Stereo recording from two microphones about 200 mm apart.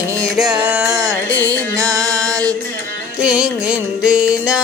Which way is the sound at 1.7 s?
15° right (ahead or behind).